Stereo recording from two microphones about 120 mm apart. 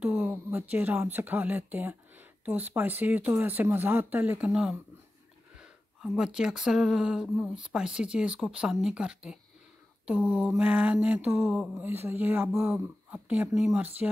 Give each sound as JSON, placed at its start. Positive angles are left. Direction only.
{"t": 0.0, "sound": "speech", "side_deg": -15}
{"t": 4.5, "sound": "speech", "side_deg": -5}